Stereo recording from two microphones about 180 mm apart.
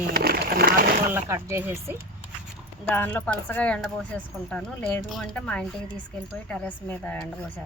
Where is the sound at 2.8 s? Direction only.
10° left (ahead or behind).